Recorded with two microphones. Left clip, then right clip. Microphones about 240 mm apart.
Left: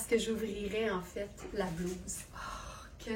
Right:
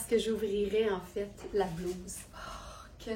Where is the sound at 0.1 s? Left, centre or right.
Centre.